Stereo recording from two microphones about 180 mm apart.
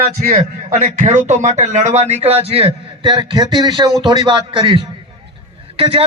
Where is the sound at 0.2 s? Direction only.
40° right (ahead or behind).